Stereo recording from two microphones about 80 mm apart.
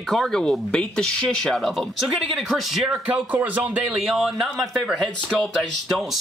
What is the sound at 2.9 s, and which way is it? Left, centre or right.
Speech, centre.